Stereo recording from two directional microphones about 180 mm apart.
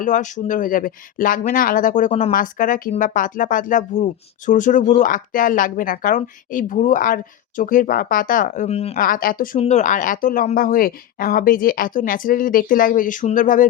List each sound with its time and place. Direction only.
0.0 s speech: 45° left (ahead or behind)
8.6 s speech: 35° left (ahead or behind)
9.0 s speech: 50° left (ahead or behind)